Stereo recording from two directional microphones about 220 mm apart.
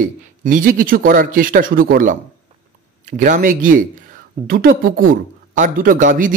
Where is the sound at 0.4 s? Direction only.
35° right (ahead or behind).